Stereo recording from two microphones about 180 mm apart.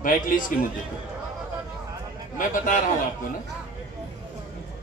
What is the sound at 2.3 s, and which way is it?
Speech, 45° left (ahead or behind).